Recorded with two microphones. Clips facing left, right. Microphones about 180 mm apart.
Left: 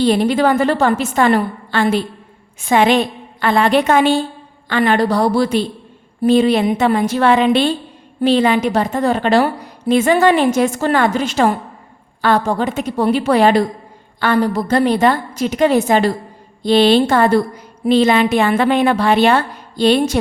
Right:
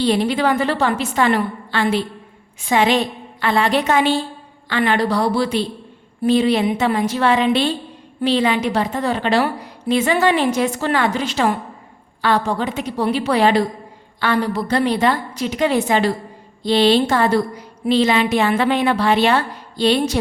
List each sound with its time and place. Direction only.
0.0 s a woman's voice: 50° left (ahead or behind)